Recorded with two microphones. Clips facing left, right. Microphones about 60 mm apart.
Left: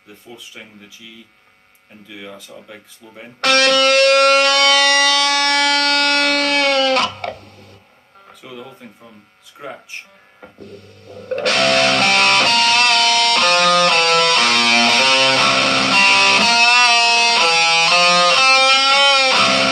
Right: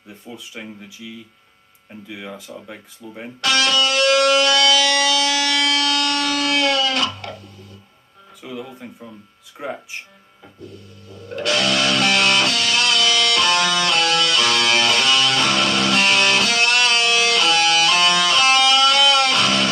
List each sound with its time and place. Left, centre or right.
0.6 s speech: centre
3.3 s music: left
10.6 s music: left